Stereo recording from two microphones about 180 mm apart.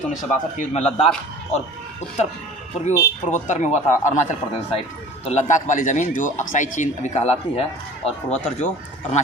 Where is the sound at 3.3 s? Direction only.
40° left (ahead or behind).